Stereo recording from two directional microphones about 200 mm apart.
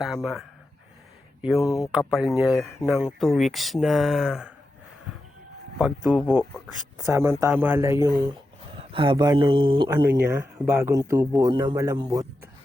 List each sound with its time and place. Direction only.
0.0 s speech: centre (ahead or behind)
1.6 s speech: 15° left (ahead or behind)
1.9 s speech: centre (ahead or behind)
6.1 s speech: 10° right (ahead or behind)
8.7 s speech: 25° right (ahead or behind)
10.2 s speech: 10° right (ahead or behind)